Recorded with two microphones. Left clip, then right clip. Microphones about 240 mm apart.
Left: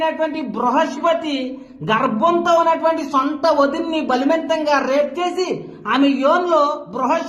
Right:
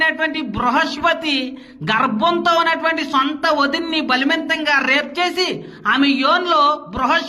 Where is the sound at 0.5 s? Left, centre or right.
Right.